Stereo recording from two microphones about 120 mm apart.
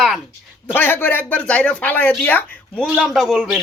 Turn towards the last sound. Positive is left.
turn(degrees=-5)  # may be behind; listen again after turning